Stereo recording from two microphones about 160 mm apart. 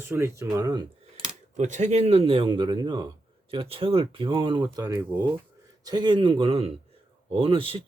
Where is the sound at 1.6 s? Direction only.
50° right (ahead or behind).